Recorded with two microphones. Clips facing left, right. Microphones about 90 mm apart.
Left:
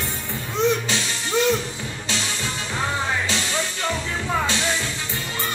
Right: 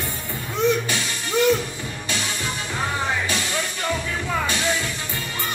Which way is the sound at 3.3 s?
25° left (ahead or behind).